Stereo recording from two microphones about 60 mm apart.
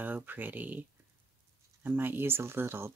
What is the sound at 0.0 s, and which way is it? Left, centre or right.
Speech, right.